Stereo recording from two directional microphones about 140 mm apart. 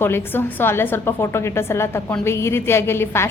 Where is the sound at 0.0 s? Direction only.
15° left (ahead or behind).